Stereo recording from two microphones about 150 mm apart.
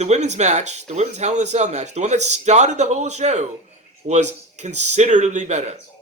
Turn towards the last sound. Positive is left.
turn(degrees=-50)  # may be behind; listen again after turning